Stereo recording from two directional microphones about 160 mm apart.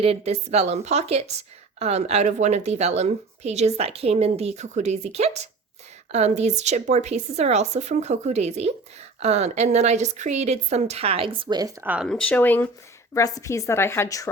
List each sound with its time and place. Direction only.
0.0 s speech: 40° right (ahead or behind); by 11.8 s 25° right (ahead or behind)
11.8 s speech: 10° right (ahead or behind)
12.0 s speech: 5° left (ahead or behind)
13.1 s a woman's voice: 20° left (ahead or behind)